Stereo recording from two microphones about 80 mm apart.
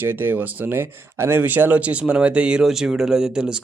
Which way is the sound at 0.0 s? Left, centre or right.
Right.